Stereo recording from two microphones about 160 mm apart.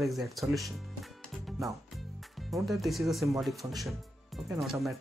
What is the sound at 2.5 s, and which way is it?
Speech, centre (ahead or behind).